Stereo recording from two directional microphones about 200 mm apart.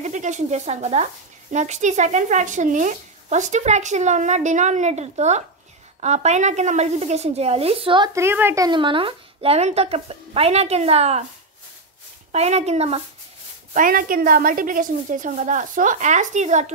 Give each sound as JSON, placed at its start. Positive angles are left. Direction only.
{"t": 0.0, "sound": "speech", "side_deg": -35}
{"t": 12.3, "sound": "speech", "side_deg": -35}
{"t": 13.7, "sound": "speech", "side_deg": -45}